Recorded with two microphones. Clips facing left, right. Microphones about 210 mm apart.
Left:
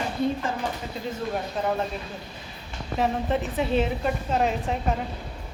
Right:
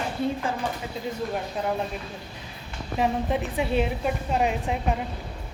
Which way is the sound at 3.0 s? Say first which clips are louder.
Even; 10° right (ahead or behind).